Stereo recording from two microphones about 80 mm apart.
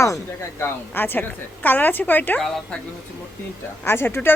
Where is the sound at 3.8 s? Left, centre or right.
Left.